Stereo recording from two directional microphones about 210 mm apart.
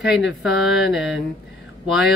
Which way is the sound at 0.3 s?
Centre (ahead or behind).